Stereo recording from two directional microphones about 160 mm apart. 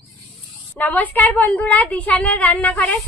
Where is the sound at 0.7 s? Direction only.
10° left (ahead or behind).